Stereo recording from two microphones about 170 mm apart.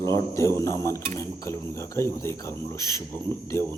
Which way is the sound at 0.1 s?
15° left (ahead or behind).